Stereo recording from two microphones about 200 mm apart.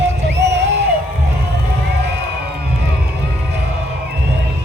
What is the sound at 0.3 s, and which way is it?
Music, 60° right (ahead or behind).